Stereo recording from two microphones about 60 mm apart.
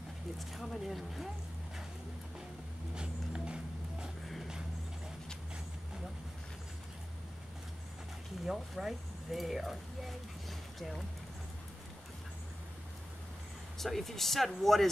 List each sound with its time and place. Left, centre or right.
0.4 s speech: centre
2.9 s a sound: centre
8.5 s speech: centre
13.7 s speech: centre